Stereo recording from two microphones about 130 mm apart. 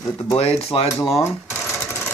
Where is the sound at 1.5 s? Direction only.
5° right (ahead or behind).